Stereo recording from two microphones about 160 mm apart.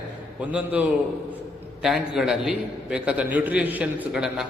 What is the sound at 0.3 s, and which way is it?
A man's voice, 10° right (ahead or behind).